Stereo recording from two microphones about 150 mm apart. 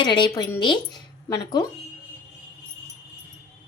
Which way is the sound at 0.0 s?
30° left (ahead or behind).